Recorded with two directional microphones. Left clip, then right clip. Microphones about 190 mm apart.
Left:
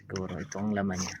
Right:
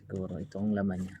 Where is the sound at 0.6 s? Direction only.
20° right (ahead or behind).